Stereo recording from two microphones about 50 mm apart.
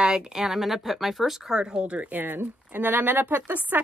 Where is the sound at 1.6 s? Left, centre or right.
Centre.